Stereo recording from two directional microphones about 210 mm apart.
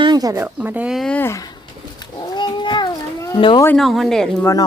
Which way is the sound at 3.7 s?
Centre (ahead or behind).